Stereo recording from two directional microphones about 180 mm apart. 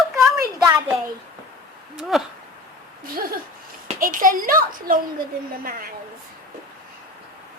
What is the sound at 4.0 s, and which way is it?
Speech, 50° right (ahead or behind).